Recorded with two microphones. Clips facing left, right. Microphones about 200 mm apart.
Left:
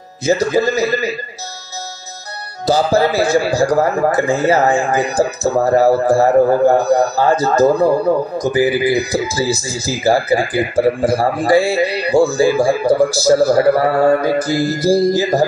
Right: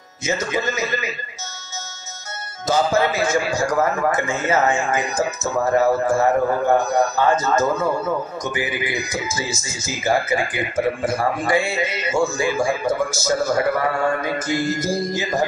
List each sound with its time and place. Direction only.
0.2 s a man's voice: 35° left (ahead or behind)
2.6 s a man's voice: 35° left (ahead or behind)